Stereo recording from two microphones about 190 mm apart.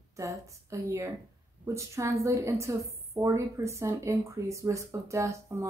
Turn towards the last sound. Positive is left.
turn(degrees=-15)  # may be behind; listen again after turning